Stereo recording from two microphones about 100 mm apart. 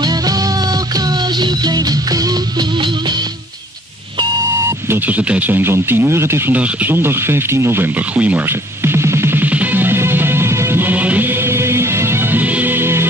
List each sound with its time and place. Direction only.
0.0 s music: 40° right (ahead or behind)
4.6 s radio: 25° right (ahead or behind)